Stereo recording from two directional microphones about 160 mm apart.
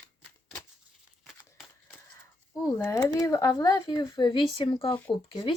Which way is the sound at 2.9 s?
20° left (ahead or behind).